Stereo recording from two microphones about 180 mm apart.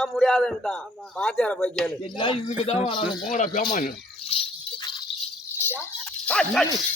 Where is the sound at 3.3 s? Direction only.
50° left (ahead or behind).